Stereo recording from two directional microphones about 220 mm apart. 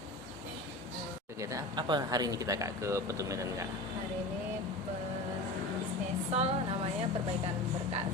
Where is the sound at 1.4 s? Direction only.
15° right (ahead or behind).